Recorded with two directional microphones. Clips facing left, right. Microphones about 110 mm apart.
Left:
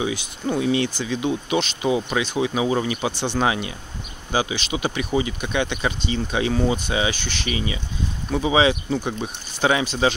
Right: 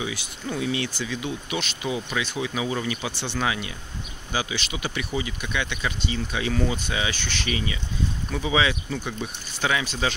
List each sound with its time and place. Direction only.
0.0 s speech: 30° left (ahead or behind)
3.1 s speech: 15° left (ahead or behind)
3.3 s speech: 30° left (ahead or behind)